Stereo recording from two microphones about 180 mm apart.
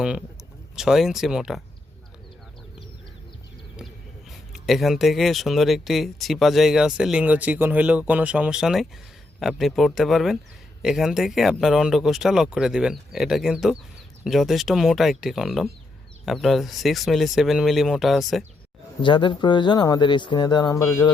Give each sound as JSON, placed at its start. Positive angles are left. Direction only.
{"t": 0.8, "sound": "speech", "side_deg": 0}
{"t": 4.3, "sound": "speech", "side_deg": 0}
{"t": 19.0, "sound": "speech", "side_deg": 25}